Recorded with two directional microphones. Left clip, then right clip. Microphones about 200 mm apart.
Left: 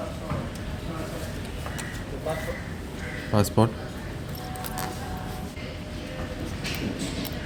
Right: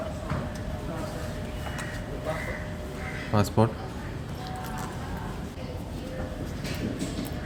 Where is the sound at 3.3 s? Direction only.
10° left (ahead or behind).